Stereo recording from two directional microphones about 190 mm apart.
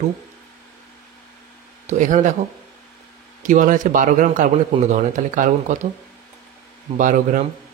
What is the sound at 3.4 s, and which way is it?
Speech, 40° right (ahead or behind).